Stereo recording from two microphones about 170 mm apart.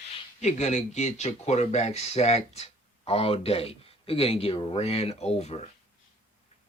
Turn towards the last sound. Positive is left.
turn(degrees=40)  # may be behind; listen again after turning